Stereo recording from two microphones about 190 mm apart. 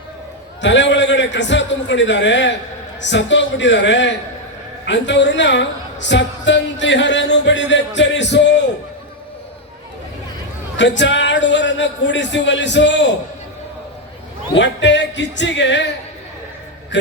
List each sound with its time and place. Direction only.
0.6 s a man's voice: 70° left (ahead or behind)
10.8 s a man's voice: 70° left (ahead or behind)
14.5 s a man's voice: 70° left (ahead or behind)
16.9 s a man's voice: 70° left (ahead or behind)